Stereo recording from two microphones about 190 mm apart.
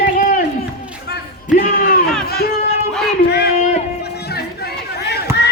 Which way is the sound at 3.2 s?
60° left (ahead or behind).